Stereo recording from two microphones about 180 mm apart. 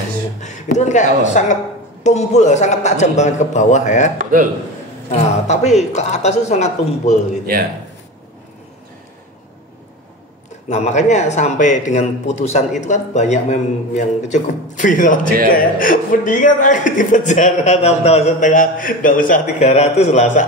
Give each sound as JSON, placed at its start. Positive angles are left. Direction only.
{"t": 0.4, "sound": "a man's voice", "side_deg": 40}
{"t": 5.1, "sound": "a man's voice", "side_deg": 40}
{"t": 10.7, "sound": "a man's voice", "side_deg": 40}